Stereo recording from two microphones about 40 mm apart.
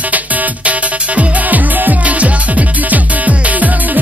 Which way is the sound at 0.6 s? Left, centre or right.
Right.